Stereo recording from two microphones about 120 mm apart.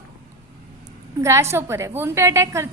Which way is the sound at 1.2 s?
25° right (ahead or behind).